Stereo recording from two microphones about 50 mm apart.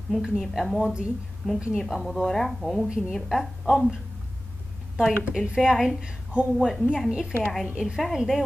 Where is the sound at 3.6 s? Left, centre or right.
Centre.